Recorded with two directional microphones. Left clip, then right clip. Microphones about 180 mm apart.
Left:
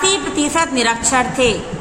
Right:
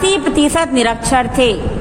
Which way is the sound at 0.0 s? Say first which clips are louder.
Right 4 dB; 35° right (ahead or behind).